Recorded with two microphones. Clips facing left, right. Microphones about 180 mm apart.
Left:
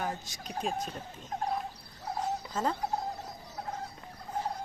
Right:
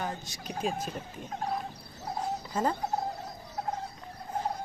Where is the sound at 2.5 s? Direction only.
10° right (ahead or behind).